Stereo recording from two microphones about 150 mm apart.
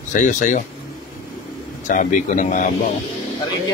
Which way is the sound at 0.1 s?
55° left (ahead or behind).